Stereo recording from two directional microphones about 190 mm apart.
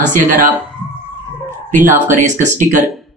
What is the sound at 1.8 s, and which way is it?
Speech, 45° right (ahead or behind).